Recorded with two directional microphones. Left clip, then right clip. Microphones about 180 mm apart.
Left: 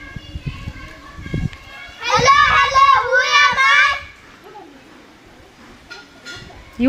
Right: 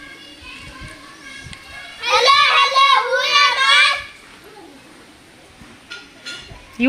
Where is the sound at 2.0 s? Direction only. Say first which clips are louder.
Left 1 dB; 10° right (ahead or behind).